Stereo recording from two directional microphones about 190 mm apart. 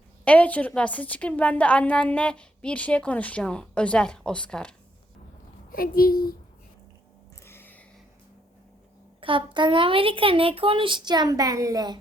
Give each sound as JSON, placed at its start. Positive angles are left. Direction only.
{"t": 0.3, "sound": "a woman's voice", "side_deg": 10}
{"t": 5.7, "sound": "speech", "side_deg": 50}
{"t": 7.4, "sound": "a sound", "side_deg": 10}
{"t": 9.2, "sound": "speech", "side_deg": -25}